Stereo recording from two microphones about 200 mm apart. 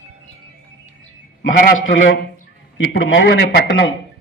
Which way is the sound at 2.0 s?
65° left (ahead or behind).